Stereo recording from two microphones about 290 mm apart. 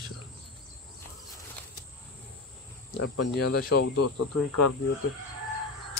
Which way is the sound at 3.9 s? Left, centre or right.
Left.